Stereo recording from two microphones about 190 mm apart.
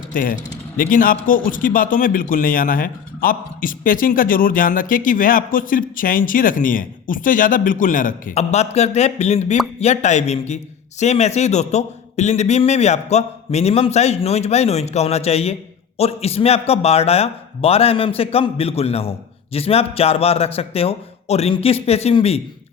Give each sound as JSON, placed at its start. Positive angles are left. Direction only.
{"t": 0.1, "sound": "a man's voice", "side_deg": 45}